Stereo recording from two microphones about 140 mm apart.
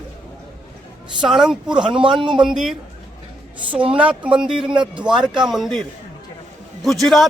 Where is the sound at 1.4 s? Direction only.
5° right (ahead or behind).